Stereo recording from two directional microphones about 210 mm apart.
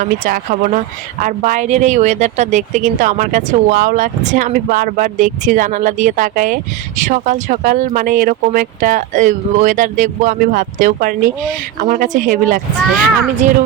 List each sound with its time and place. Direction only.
0.0 s a woman's voice: 40° right (ahead or behind)